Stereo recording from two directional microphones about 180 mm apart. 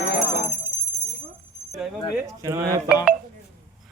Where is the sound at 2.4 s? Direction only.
15° right (ahead or behind).